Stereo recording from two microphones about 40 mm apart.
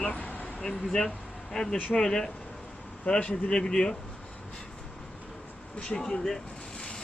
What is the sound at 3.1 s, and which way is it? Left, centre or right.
Speech, left.